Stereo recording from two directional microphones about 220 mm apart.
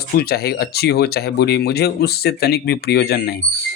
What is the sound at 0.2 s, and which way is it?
Speech, 45° left (ahead or behind).